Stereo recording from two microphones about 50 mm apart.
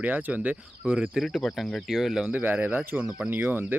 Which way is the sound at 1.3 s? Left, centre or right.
Centre.